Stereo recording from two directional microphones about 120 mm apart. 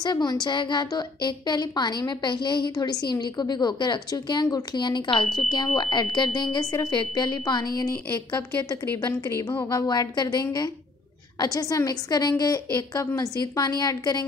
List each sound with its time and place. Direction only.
0.0 s a woman's voice: 35° left (ahead or behind)
8.8 s a woman's voice: 20° left (ahead or behind)
9.7 s a woman's voice: 30° left (ahead or behind)